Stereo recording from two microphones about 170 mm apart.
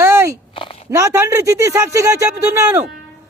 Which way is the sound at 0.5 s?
30° left (ahead or behind).